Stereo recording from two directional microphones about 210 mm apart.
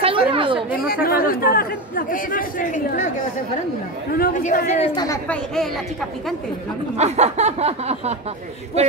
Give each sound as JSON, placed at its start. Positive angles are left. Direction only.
{"t": 0.0, "sound": "speech", "side_deg": -25}
{"t": 1.0, "sound": "speech", "side_deg": 45}
{"t": 4.2, "sound": "speech", "side_deg": 40}
{"t": 5.0, "sound": "a woman's voice", "side_deg": 15}
{"t": 7.0, "sound": "a sound", "side_deg": -30}